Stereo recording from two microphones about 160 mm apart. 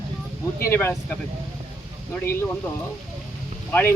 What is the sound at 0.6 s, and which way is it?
Speech, 15° left (ahead or behind).